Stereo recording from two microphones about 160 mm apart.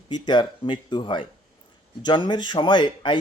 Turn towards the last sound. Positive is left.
turn(degrees=30)  # may be behind; listen again after turning